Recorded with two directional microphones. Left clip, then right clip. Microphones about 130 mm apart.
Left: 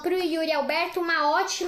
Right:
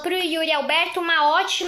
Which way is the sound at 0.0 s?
15° left (ahead or behind).